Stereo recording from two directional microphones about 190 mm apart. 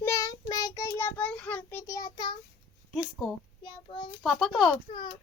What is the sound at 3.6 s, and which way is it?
Child singing, 25° left (ahead or behind).